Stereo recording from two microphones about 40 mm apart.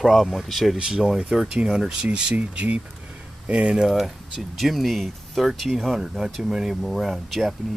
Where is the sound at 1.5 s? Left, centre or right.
Centre.